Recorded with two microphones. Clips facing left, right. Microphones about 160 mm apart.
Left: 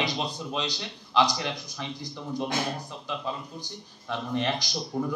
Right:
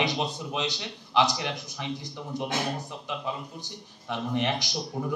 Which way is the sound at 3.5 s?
15° right (ahead or behind).